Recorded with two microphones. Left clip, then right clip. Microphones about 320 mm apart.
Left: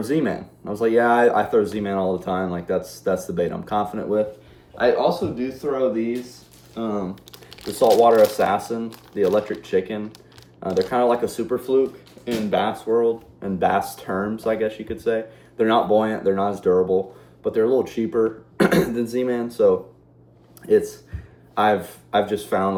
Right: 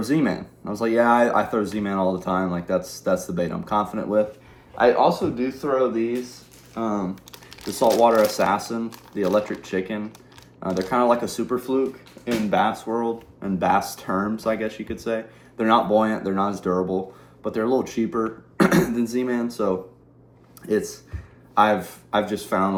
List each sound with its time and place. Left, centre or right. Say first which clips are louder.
0.0 s speech: even; centre